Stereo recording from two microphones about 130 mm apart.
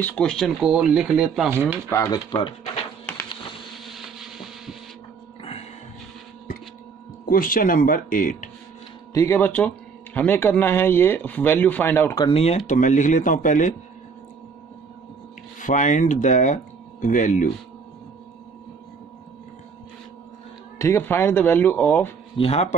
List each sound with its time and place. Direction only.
0.0 s speech: 5° left (ahead or behind)
0.6 s speech: 5° right (ahead or behind)
1.9 s speech: 25° left (ahead or behind)
3.9 s a sound: centre (ahead or behind)
5.4 s music: 50° left (ahead or behind)
7.2 s speech: 90° left
9.1 s speech: 20° left (ahead or behind)
12.3 s speech: 50° left (ahead or behind)
12.5 s speech: 80° left
15.6 s speech: 70° left (ahead or behind)
20.8 s speech: 20° left (ahead or behind)
22.4 s speech: 55° left (ahead or behind)